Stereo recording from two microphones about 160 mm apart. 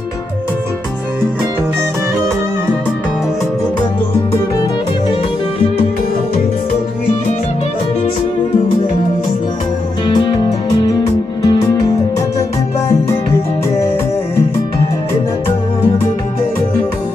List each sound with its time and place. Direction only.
10.0 s music: 25° left (ahead or behind)